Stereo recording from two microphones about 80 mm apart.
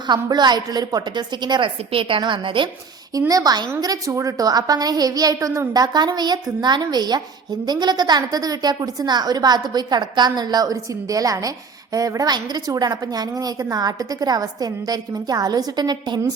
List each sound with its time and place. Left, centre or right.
0.1 s a woman's voice: right
3.2 s a woman's voice: right